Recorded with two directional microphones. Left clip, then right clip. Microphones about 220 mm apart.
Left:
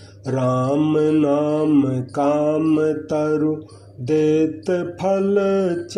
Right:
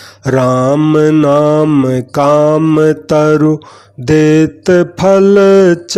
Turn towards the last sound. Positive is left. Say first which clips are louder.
# right 12 dB
turn(degrees=-40)  # may be behind; listen again after turning